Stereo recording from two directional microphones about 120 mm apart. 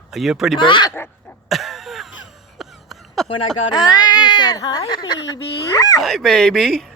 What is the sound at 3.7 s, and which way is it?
Speech, 35° left (ahead or behind).